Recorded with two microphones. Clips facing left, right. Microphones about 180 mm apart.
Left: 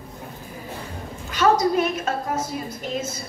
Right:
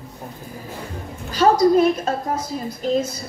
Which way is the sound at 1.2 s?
35° right (ahead or behind).